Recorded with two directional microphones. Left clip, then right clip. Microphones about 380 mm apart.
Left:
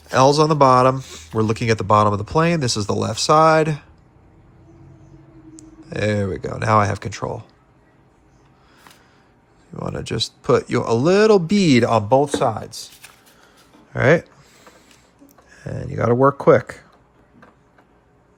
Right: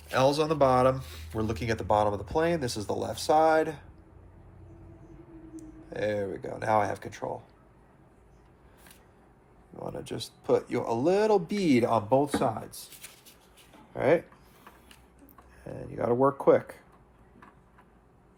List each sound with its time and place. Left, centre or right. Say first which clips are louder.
0.1 s speech: left 10 dB; centre
5.5 s speech: left 8 dB; left
9.8 s speech: left 12 dB; left
15.8 s speech: left 9 dB; left